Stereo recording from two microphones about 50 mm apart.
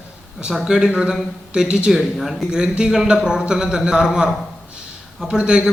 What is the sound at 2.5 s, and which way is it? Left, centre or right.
A man's voice, centre.